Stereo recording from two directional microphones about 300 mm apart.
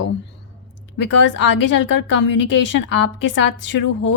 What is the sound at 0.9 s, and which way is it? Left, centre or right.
A woman's voice, left.